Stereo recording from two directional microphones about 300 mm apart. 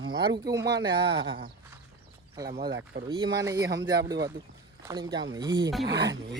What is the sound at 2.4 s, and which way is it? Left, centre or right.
Speech, centre.